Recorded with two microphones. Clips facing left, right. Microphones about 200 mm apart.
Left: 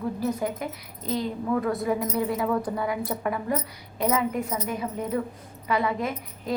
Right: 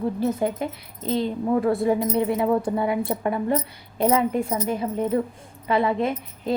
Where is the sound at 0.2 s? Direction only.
25° right (ahead or behind).